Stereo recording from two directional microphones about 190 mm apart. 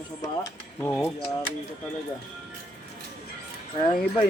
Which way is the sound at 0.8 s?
10° left (ahead or behind).